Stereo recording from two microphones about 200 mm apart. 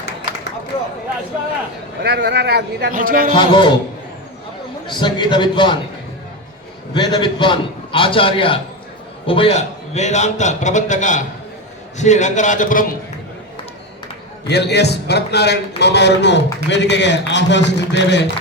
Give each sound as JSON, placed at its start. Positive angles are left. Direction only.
{"t": 2.0, "sound": "a man's voice", "side_deg": -55}
{"t": 3.3, "sound": "a man's voice", "side_deg": 25}
{"t": 4.9, "sound": "a man's voice", "side_deg": 25}
{"t": 6.9, "sound": "a man's voice", "side_deg": 25}
{"t": 14.4, "sound": "a man's voice", "side_deg": 55}